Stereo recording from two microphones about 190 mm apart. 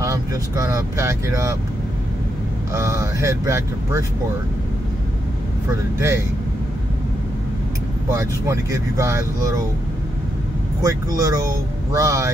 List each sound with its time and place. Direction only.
0.0 s speech: 15° right (ahead or behind)
2.7 s speech: 15° right (ahead or behind)
5.9 s speech: 15° right (ahead or behind)
8.1 s speech: 15° right (ahead or behind)
10.8 s speech: 15° right (ahead or behind)